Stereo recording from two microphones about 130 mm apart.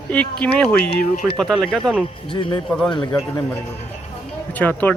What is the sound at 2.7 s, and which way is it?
Speech, 5° left (ahead or behind).